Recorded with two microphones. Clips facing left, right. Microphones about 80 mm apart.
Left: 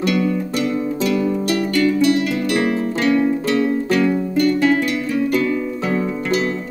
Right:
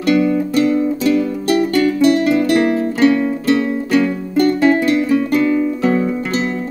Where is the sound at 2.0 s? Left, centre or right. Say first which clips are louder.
Right 4 dB; right.